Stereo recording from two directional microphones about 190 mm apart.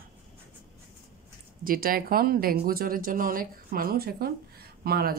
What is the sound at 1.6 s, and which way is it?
Speech, 50° right (ahead or behind).